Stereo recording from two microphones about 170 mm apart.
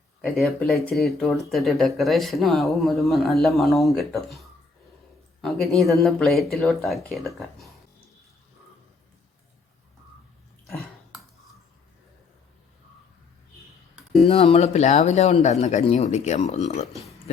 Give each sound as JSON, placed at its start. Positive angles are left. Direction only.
{"t": 0.2, "sound": "a man's voice", "side_deg": 0}
{"t": 11.1, "sound": "cutlery", "side_deg": -5}
{"t": 14.3, "sound": "speech", "side_deg": 35}
{"t": 16.9, "sound": "a sound", "side_deg": 0}